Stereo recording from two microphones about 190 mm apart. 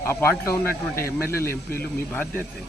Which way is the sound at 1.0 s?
50° left (ahead or behind).